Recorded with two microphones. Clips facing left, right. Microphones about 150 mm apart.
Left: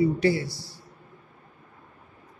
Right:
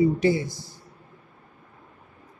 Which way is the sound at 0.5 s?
50° right (ahead or behind).